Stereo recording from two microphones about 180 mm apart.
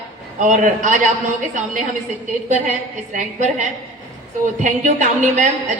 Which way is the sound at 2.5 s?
40° right (ahead or behind).